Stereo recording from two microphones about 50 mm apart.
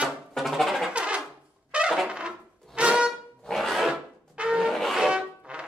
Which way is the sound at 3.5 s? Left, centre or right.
Centre.